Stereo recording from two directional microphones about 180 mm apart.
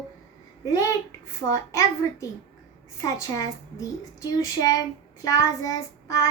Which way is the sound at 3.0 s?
20° left (ahead or behind).